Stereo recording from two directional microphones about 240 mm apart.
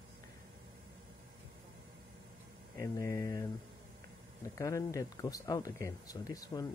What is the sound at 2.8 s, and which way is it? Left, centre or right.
Speech, centre.